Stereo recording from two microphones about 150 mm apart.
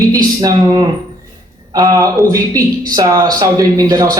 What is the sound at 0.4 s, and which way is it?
A woman's voice, 30° right (ahead or behind).